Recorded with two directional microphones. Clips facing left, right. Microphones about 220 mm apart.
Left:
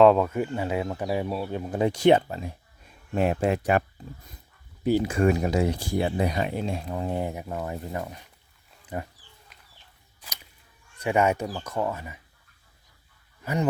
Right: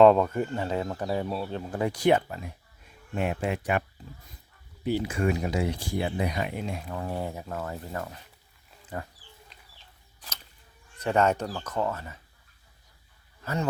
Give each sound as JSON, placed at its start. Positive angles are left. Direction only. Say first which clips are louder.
{"t": 0.0, "sound": "speech", "louder": "even", "side_deg": 0}
{"t": 3.2, "sound": "speech", "louder": "left 5 dB", "side_deg": 35}
{"t": 4.9, "sound": "speech", "louder": "left 5 dB", "side_deg": 40}
{"t": 10.2, "sound": "a sound", "louder": "even", "side_deg": 10}
{"t": 11.0, "sound": "speech", "louder": "left 1 dB", "side_deg": 10}
{"t": 13.4, "sound": "speech", "louder": "left 3 dB", "side_deg": 15}